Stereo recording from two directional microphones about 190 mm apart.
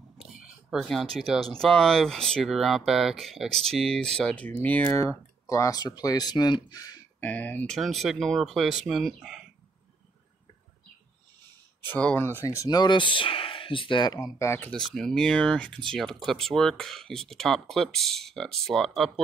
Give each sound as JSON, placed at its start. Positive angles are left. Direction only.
{"t": 0.4, "sound": "speech", "side_deg": 0}
{"t": 7.2, "sound": "speech", "side_deg": 10}
{"t": 11.8, "sound": "speech", "side_deg": 10}
{"t": 12.4, "sound": "speech", "side_deg": 20}